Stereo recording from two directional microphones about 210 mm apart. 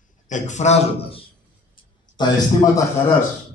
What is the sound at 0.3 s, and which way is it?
Speech, 35° left (ahead or behind).